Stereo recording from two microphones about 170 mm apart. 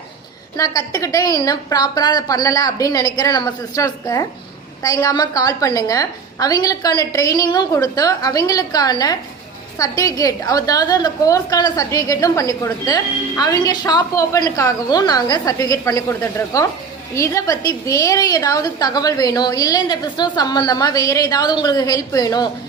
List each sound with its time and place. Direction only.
0.5 s a woman's voice: 20° left (ahead or behind)